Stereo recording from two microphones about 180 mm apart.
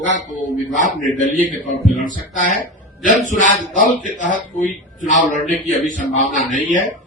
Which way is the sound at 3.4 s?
45° left (ahead or behind).